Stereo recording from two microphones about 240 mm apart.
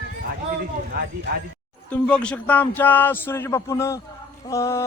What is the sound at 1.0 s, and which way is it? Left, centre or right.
Speech, right.